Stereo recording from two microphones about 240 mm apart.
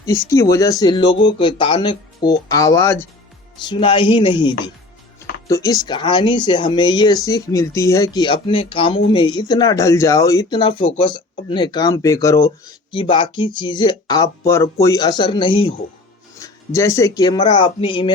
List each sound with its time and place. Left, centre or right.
0.0 s speech: centre